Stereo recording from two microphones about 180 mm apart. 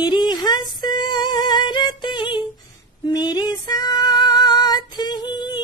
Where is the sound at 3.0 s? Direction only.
20° left (ahead or behind).